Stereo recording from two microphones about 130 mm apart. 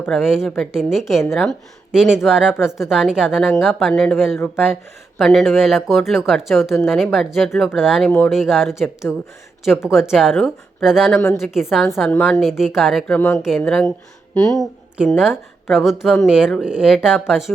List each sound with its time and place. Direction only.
0.1 s speech: 5° right (ahead or behind)
12.0 s a woman's voice: 10° left (ahead or behind)
12.4 s speech: 5° right (ahead or behind)
13.1 s a woman's voice: 20° left (ahead or behind)
13.7 s speech: 5° left (ahead or behind)
14.9 s speech: 5° right (ahead or behind)